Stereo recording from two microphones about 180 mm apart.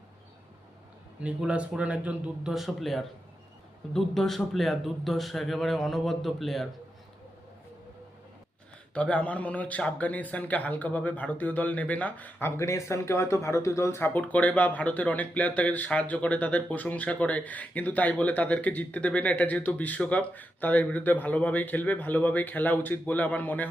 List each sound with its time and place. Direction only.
1.2 s a man's voice: 5° right (ahead or behind)
9.0 s speech: 5° left (ahead or behind)